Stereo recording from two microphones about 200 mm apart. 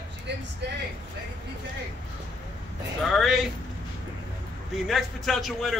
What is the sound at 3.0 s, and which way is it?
Speech, centre (ahead or behind).